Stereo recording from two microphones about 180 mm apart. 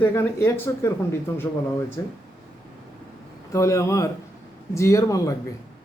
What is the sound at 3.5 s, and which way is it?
Speech, 15° left (ahead or behind).